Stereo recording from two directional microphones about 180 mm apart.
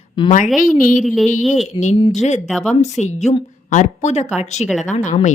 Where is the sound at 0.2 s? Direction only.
25° left (ahead or behind).